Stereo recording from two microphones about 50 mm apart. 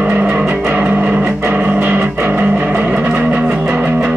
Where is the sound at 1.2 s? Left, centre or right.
Centre.